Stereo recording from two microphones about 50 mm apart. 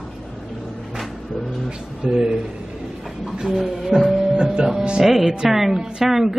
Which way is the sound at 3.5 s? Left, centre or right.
Centre.